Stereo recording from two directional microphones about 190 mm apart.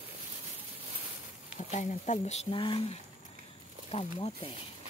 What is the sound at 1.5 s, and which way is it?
Speech, 40° left (ahead or behind).